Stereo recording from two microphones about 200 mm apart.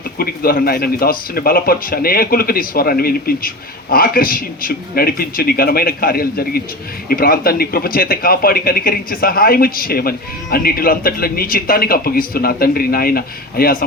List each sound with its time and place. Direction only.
0.2 s speech: 50° left (ahead or behind)